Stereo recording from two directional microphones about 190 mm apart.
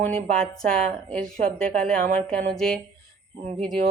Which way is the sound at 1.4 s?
50° right (ahead or behind).